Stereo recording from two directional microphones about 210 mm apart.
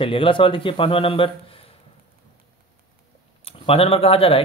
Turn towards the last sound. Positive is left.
turn(degrees=25)  # may be behind; listen again after turning